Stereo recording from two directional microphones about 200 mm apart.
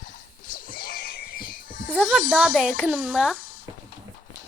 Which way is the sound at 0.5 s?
45° left (ahead or behind).